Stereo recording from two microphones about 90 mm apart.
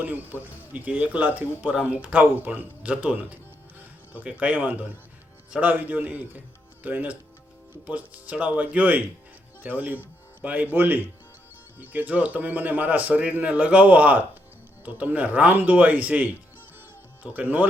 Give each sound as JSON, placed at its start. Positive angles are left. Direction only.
{"t": 0.0, "sound": "speech", "side_deg": -20}